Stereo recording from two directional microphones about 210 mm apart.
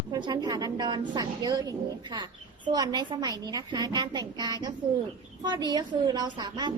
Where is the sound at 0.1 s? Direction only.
20° right (ahead or behind).